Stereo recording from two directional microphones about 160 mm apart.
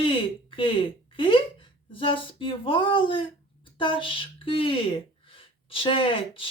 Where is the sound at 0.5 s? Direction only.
30° left (ahead or behind).